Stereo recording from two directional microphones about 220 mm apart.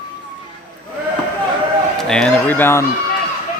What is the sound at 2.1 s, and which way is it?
Speech, 5° left (ahead or behind).